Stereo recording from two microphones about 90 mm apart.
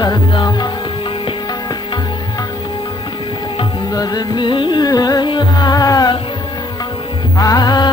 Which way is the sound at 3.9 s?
50° left (ahead or behind).